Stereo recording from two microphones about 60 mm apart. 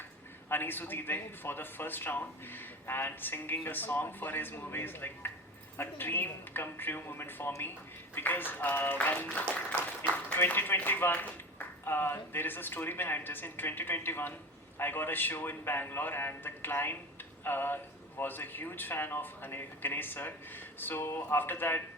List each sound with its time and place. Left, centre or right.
0.4 s a man's voice: left